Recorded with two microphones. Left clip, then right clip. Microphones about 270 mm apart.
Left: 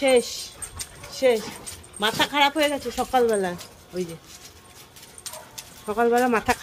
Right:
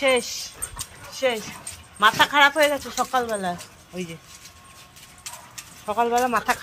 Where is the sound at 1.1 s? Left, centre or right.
Centre.